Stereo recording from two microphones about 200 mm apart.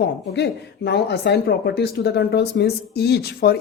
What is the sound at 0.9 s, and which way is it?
Speech, 55° left (ahead or behind).